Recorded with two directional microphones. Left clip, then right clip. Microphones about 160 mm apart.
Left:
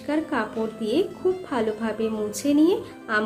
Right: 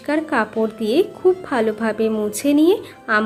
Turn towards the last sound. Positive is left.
turn(degrees=-30)  # may be behind; listen again after turning